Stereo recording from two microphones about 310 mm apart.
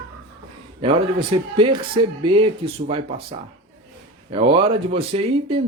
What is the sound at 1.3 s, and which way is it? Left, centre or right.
Speech, centre.